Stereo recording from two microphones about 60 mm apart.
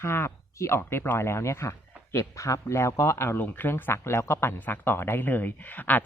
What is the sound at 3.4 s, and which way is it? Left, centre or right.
Speech, left.